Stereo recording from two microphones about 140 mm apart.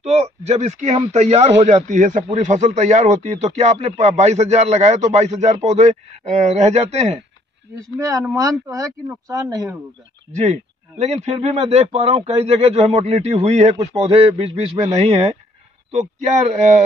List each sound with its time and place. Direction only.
0.0 s a man's voice: 50° right (ahead or behind)
7.7 s speech: 25° right (ahead or behind)
10.3 s a man's voice: 55° right (ahead or behind)